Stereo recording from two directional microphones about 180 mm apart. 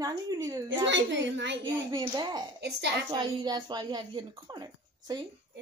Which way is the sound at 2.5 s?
70° right (ahead or behind).